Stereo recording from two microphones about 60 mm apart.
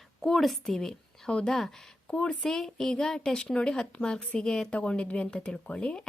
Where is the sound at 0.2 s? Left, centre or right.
Centre.